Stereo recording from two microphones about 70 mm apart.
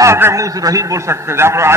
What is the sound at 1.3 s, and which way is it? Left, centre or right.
Speech, right.